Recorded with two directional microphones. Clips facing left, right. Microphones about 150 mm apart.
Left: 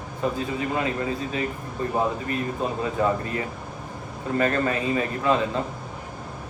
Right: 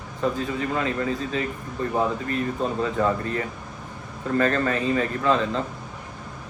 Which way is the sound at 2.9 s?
20° left (ahead or behind).